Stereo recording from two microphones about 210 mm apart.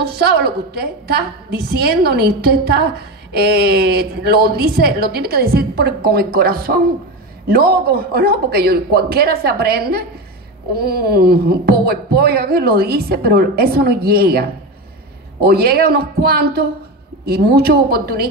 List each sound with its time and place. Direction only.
0.0 s speech: 50° right (ahead or behind)
15.4 s speech: 45° right (ahead or behind)